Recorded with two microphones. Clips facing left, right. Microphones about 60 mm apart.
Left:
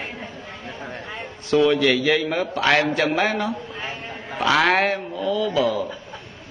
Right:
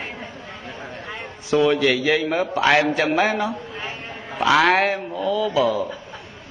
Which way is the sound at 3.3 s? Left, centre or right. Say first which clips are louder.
Right 1 dB; centre.